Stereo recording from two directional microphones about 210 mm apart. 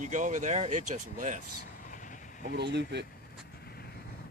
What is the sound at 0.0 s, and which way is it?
Speech, 35° right (ahead or behind).